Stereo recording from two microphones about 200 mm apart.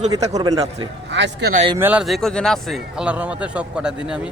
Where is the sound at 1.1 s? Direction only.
60° right (ahead or behind).